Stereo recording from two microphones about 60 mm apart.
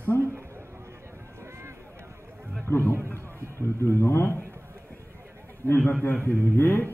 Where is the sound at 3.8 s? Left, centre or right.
Left.